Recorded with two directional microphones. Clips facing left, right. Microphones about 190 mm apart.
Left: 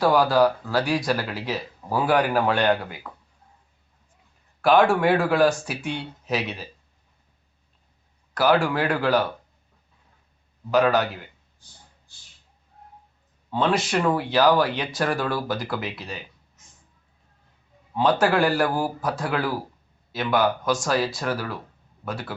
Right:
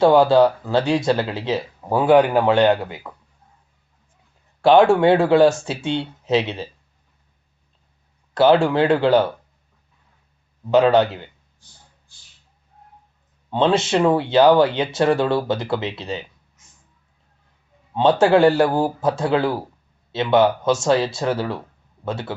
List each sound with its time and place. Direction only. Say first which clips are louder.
0.0 s speech: right 5 dB; 25° right (ahead or behind)
4.6 s speech: right 5 dB; 25° right (ahead or behind)
8.4 s speech: right 6 dB; 25° right (ahead or behind)
10.7 s speech: right 5 dB; 25° right (ahead or behind)
13.5 s speech: right 5 dB; 25° right (ahead or behind)
17.9 s speech: right 5 dB; 25° right (ahead or behind)